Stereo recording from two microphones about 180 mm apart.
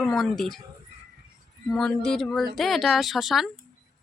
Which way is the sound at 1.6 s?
5° left (ahead or behind).